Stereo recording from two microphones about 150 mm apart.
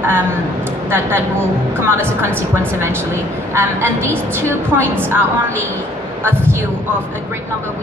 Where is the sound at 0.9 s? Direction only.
15° right (ahead or behind).